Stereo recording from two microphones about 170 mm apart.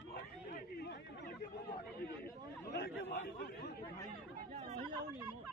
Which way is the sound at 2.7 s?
75° left (ahead or behind).